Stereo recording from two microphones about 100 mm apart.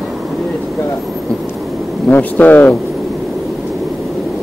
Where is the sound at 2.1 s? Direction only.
15° left (ahead or behind).